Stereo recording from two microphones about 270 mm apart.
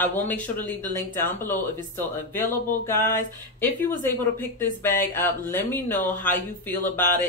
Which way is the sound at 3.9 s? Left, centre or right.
Centre.